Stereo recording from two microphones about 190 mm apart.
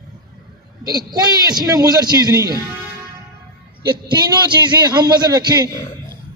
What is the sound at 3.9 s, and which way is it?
A man's voice, 25° right (ahead or behind).